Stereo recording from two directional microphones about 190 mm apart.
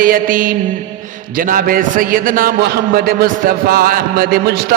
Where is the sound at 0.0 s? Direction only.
45° right (ahead or behind).